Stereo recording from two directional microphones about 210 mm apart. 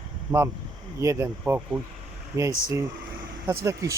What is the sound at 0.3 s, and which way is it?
Speech, 10° right (ahead or behind).